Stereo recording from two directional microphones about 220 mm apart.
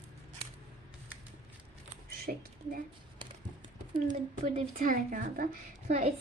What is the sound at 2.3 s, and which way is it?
Speech, 40° right (ahead or behind).